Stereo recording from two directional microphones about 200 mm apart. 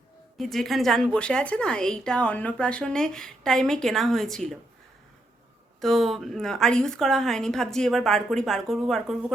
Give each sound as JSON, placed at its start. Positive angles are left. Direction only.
{"t": 0.3, "sound": "a woman's voice", "side_deg": 0}
{"t": 5.8, "sound": "a woman's voice", "side_deg": 0}